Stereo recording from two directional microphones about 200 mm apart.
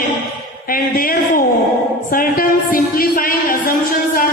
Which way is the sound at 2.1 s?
45° left (ahead or behind).